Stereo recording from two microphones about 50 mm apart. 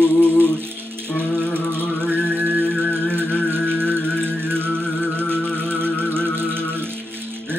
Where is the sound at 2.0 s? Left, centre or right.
Right.